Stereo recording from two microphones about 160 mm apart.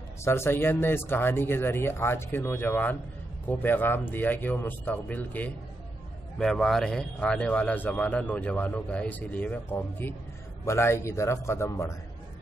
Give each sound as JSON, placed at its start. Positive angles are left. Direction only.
{"t": 0.2, "sound": "a man's voice", "side_deg": 15}